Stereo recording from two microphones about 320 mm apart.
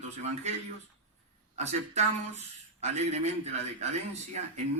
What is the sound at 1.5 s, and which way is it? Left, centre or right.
Speech, right.